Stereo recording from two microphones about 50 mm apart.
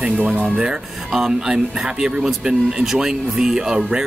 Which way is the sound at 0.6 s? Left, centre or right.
Centre.